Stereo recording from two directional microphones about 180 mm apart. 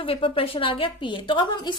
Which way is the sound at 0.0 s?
30° left (ahead or behind).